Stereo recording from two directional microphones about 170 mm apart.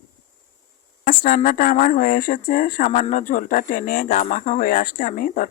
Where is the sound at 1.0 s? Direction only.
55° left (ahead or behind).